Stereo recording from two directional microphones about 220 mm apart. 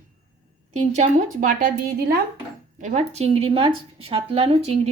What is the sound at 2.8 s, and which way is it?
Speech, 30° right (ahead or behind).